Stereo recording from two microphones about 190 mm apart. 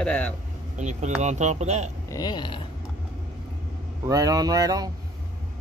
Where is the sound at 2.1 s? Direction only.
20° left (ahead or behind).